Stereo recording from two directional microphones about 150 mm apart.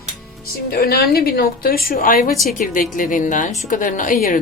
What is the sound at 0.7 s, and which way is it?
A woman's voice, 90° left.